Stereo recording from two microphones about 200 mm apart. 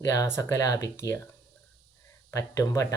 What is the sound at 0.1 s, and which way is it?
Speech, 15° left (ahead or behind).